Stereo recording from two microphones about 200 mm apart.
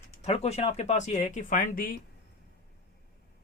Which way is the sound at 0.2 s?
30° left (ahead or behind).